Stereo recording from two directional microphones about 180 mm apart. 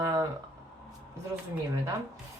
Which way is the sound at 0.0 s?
20° right (ahead or behind).